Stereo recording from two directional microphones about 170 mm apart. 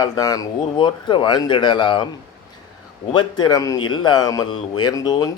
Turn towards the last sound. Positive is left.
turn(degrees=20)  # may be behind; listen again after turning